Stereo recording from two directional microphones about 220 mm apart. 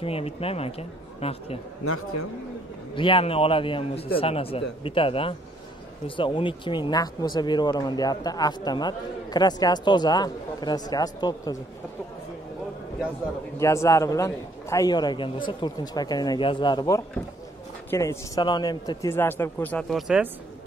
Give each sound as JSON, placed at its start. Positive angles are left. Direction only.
{"t": 0.0, "sound": "speech", "side_deg": 25}
{"t": 2.9, "sound": "speech", "side_deg": 20}
{"t": 13.6, "sound": "a man's voice", "side_deg": 15}